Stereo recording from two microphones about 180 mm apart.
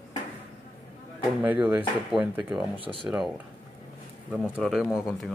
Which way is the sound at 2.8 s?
30° right (ahead or behind).